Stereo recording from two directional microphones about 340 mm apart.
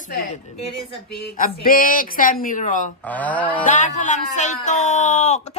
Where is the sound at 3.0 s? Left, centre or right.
Centre.